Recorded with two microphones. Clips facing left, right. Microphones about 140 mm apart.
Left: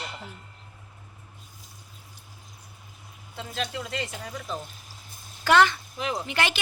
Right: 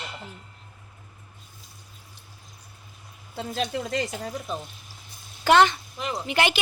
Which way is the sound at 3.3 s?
40° right (ahead or behind).